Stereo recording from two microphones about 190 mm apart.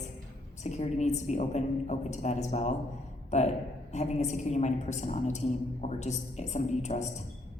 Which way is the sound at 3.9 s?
35° left (ahead or behind).